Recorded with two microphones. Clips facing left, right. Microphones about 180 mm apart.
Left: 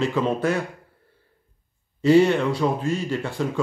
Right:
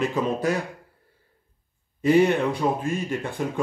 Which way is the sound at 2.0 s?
15° right (ahead or behind).